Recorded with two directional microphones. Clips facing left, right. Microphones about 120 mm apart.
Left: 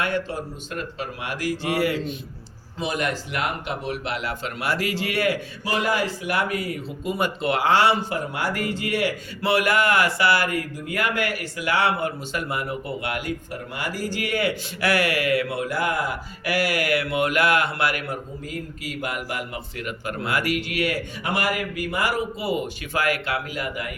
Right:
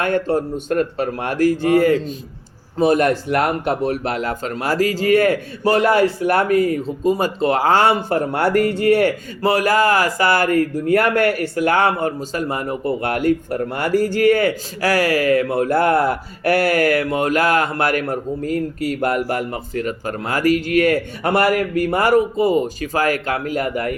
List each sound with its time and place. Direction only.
0.0 s speech: 50° right (ahead or behind)